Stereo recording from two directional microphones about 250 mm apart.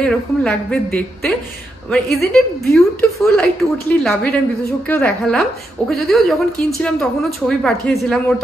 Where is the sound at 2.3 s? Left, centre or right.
Centre.